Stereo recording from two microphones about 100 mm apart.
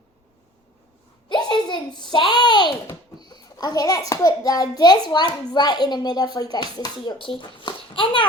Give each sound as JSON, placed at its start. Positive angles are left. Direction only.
{"t": 1.3, "sound": "a child's voice", "side_deg": 50}